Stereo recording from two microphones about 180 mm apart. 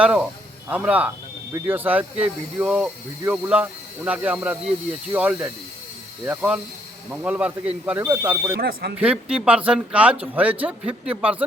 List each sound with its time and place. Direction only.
0.0 s speech: 5° right (ahead or behind)
8.5 s speech: 65° right (ahead or behind)
9.0 s speech: 5° right (ahead or behind)